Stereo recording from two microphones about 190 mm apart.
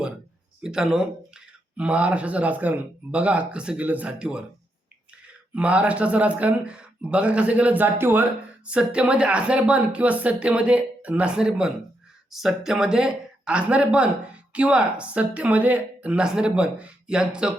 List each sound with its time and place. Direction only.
0.6 s speech: 5° right (ahead or behind)
5.5 s speech: 5° right (ahead or behind)